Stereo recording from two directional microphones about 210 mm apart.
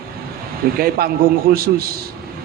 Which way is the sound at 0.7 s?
45° right (ahead or behind).